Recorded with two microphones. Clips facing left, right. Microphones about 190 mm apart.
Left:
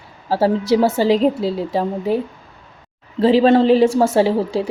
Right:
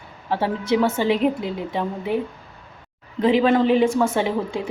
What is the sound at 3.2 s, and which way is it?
A woman's voice, 35° left (ahead or behind).